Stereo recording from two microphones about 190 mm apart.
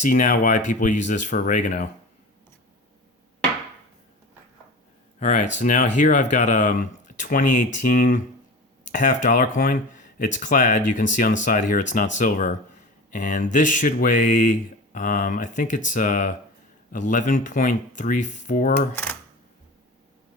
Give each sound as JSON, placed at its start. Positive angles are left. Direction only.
{"t": 0.0, "sound": "speech", "side_deg": 40}
{"t": 5.2, "sound": "speech", "side_deg": 40}